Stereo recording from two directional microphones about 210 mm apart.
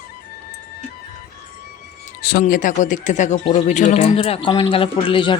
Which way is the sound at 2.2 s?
40° left (ahead or behind).